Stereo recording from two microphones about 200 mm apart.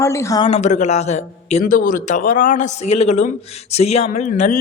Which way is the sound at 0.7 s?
35° left (ahead or behind).